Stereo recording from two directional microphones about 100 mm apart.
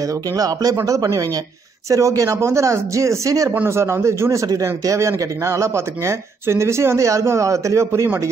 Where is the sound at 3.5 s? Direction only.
25° right (ahead or behind).